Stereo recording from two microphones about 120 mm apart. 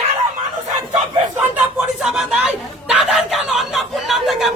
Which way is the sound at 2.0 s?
5° right (ahead or behind).